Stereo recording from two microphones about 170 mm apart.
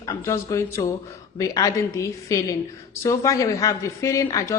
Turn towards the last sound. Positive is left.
turn(degrees=20)  # may be behind; listen again after turning